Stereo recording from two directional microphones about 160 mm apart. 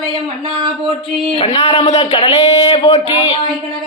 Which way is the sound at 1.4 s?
35° left (ahead or behind).